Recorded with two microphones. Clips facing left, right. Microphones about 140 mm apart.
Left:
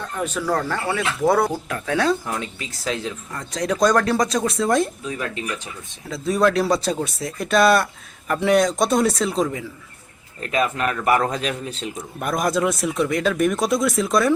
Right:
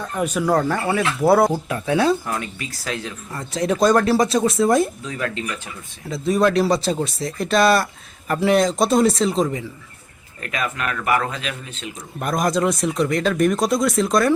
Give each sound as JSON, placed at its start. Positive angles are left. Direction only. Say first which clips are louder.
{"t": 0.2, "sound": "speech", "louder": "right 4 dB", "side_deg": -10}
{"t": 2.2, "sound": "speech", "louder": "right 1 dB", "side_deg": 20}
{"t": 3.3, "sound": "speech", "louder": "right 3 dB", "side_deg": -5}
{"t": 6.1, "sound": "speech", "louder": "right 1 dB", "side_deg": 0}
{"t": 10.4, "sound": "speech", "louder": "left 4 dB", "side_deg": 30}
{"t": 12.2, "sound": "speech", "louder": "right 1 dB", "side_deg": 0}